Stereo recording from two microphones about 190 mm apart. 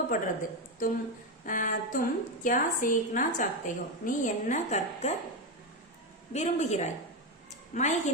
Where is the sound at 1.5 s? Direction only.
45° left (ahead or behind).